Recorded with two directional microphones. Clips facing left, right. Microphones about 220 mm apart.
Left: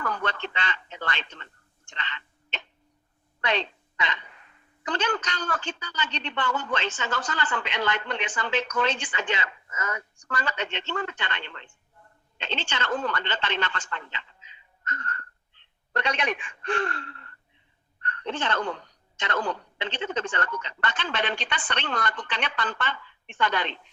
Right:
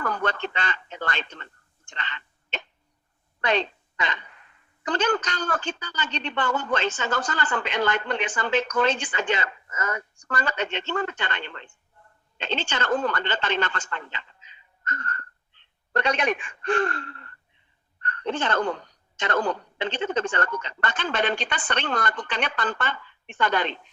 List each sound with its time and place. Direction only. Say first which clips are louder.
0.0 s speech: right 3 dB; 45° right (ahead or behind)
1.9 s hiccup: right 1 dB; 45° right (ahead or behind)
3.4 s a woman's voice: right 4 dB; 45° right (ahead or behind)